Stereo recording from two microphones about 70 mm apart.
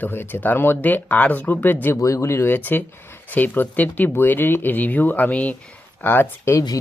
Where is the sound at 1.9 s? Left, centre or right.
Left.